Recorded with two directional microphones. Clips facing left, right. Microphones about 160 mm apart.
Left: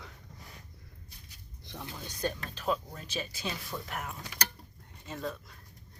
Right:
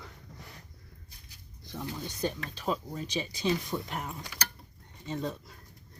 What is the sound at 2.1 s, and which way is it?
Speech, 10° right (ahead or behind).